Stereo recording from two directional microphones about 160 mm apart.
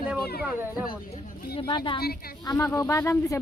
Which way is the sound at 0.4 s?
10° right (ahead or behind).